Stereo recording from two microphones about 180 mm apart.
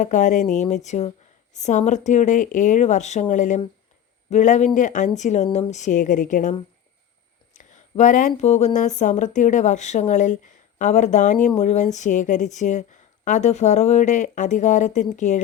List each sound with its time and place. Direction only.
0.0 s speech: 45° left (ahead or behind)
7.5 s speech: 40° left (ahead or behind)